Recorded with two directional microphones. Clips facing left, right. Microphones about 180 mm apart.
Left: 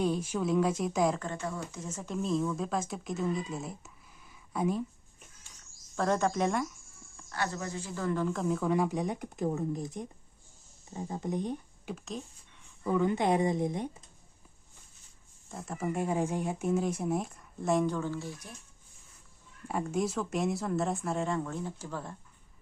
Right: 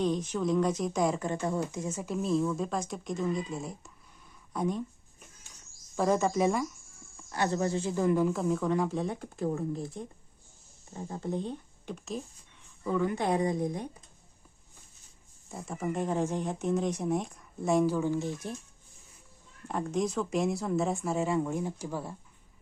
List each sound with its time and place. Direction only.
0.0 s speech: 10° left (ahead or behind)
1.7 s speech: 10° right (ahead or behind); by 4.8 s 5° left (ahead or behind)
6.0 s speech: 5° right (ahead or behind)
7.3 s speech: 20° right (ahead or behind); by 8.7 s centre (ahead or behind)
8.7 s speech: 10° left (ahead or behind)
11.9 s speech: centre (ahead or behind)
12.8 s a woman's voice: 15° left (ahead or behind)
15.4 s speech: centre (ahead or behind); by 18.3 s 20° right (ahead or behind)
19.6 s speech: 5° left (ahead or behind); by 22.1 s 10° right (ahead or behind)